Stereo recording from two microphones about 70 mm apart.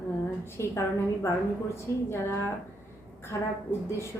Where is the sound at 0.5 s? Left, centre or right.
Left.